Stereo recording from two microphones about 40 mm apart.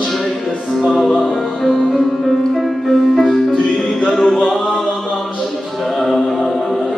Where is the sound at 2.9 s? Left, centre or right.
Centre.